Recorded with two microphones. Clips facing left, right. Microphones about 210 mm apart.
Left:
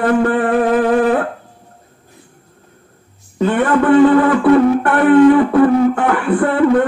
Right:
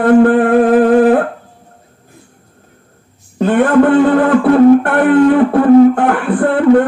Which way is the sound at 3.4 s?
50° right (ahead or behind).